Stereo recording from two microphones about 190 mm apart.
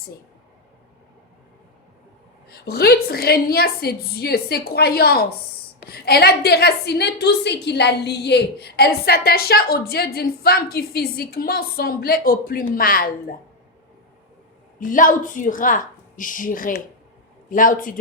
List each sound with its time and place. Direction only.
2.5 s a woman's voice: 55° left (ahead or behind)
14.8 s a woman's voice: 45° left (ahead or behind)